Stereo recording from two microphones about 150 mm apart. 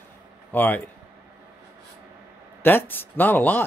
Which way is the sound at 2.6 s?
15° left (ahead or behind).